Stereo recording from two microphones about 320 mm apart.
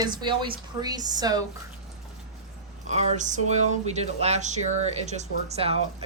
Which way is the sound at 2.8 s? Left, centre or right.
Right.